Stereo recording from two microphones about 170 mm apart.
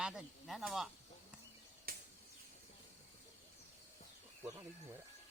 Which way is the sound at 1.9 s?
60° right (ahead or behind).